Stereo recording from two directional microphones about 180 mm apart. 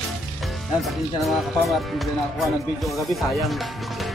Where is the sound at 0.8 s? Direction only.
Centre (ahead or behind).